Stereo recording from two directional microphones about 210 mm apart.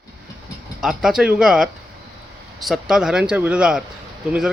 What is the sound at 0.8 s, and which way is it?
Speech, centre (ahead or behind).